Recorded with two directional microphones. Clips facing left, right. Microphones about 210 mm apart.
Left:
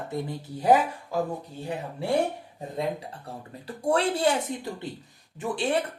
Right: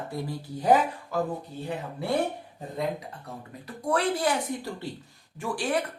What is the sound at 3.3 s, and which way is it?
Speech, 30° left (ahead or behind).